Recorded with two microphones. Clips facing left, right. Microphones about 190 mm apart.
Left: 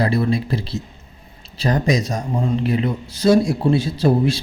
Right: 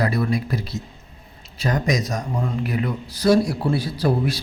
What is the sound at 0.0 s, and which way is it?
A man's voice, 30° left (ahead or behind).